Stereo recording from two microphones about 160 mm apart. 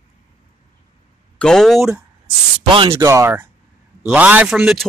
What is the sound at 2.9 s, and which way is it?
A man's voice, 20° right (ahead or behind).